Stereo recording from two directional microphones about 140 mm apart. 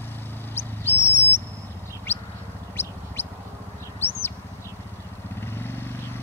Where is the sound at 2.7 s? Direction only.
15° left (ahead or behind).